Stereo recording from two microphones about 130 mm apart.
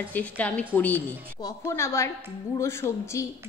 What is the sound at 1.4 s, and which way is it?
A woman's voice, 25° left (ahead or behind).